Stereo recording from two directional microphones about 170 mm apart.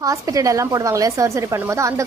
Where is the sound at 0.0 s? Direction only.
20° right (ahead or behind).